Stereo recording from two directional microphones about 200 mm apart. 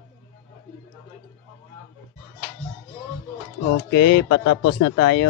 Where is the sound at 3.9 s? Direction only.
55° left (ahead or behind).